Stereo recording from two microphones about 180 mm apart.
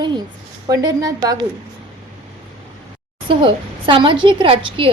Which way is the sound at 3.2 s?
25° right (ahead or behind).